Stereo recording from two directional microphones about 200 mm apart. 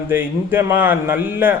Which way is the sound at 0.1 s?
10° right (ahead or behind).